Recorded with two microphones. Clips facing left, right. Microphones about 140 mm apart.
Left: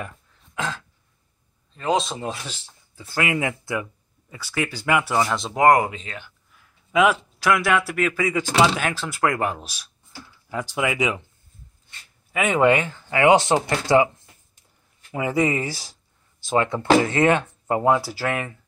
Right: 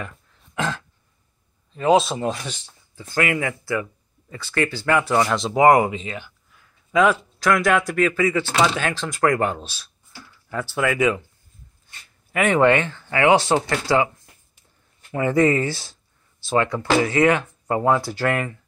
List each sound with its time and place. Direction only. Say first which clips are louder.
1.8 s speech: right 6 dB; 5° right (ahead or behind)
2.5 s speech: right 3 dB; 10° left (ahead or behind)
4.3 s speech: right 4 dB; 10° left (ahead or behind); by 6.6 s 5° right (ahead or behind)
6.9 s speech: right 1 dB; 10° left (ahead or behind)
12.3 s speech: right 1 dB; 5° left (ahead or behind)
15.1 s speech: right 4 dB; 10° left (ahead or behind)
18.0 s speech: right 3 dB; 5° left (ahead or behind)